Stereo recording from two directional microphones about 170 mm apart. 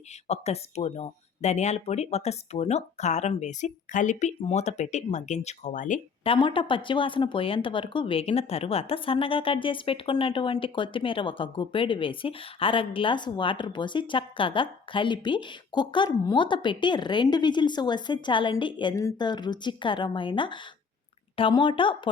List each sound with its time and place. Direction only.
0.3 s speech: 40° left (ahead or behind)
6.2 s speech: 30° left (ahead or behind)